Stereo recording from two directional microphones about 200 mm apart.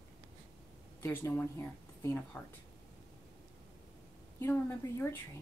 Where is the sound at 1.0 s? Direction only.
15° left (ahead or behind).